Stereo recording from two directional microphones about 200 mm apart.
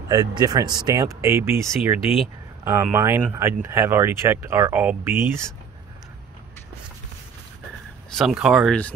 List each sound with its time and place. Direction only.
0.1 s speech: 20° right (ahead or behind)
8.1 s speech: centre (ahead or behind)